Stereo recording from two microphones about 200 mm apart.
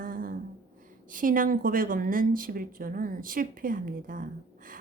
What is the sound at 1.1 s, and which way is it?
Speech, 45° right (ahead or behind).